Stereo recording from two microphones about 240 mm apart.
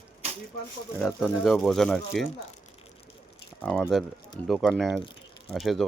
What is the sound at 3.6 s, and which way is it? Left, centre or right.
Speech, centre.